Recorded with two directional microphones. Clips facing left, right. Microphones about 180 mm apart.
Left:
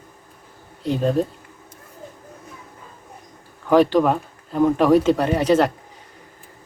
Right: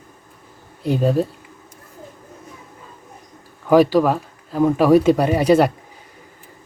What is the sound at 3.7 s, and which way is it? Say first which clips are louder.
Speech: right 2 dB; 10° right (ahead or behind).